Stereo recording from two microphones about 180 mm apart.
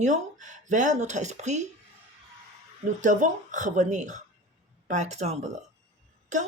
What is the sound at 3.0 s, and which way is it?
Speech, 45° right (ahead or behind).